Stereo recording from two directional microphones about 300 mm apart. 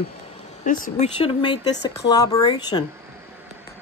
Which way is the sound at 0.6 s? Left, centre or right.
Left.